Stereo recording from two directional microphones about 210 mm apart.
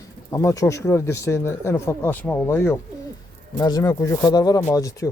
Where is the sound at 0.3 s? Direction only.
15° left (ahead or behind).